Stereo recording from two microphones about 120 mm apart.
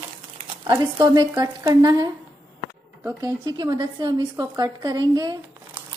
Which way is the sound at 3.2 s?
35° right (ahead or behind).